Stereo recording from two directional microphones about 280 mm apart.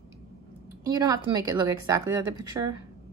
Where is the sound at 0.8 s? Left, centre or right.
Centre.